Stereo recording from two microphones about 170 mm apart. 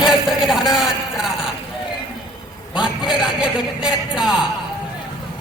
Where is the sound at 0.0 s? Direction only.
5° right (ahead or behind).